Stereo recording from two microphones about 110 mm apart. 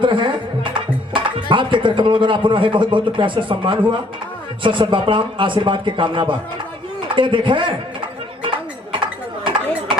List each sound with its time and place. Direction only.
0.0 s music: 50° right (ahead or behind)
4.6 s speech: 50° right (ahead or behind)
8.4 s a sound: 45° right (ahead or behind)